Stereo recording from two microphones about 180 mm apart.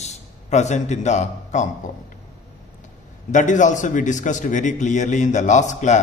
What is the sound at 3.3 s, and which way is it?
A man's voice, 45° left (ahead or behind).